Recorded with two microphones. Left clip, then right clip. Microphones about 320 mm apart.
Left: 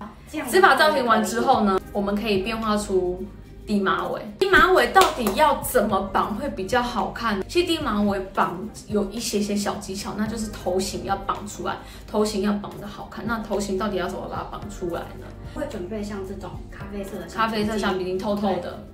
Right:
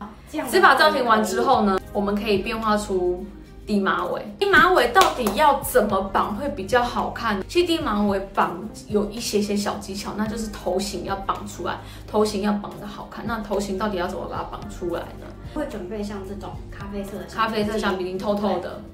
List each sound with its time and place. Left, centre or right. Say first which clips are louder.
0.5 s a woman's voice: right 1 dB; centre
17.4 s a woman's voice: right 1 dB; centre